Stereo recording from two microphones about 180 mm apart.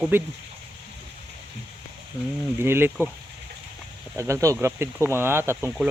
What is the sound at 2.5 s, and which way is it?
Speech, 15° right (ahead or behind).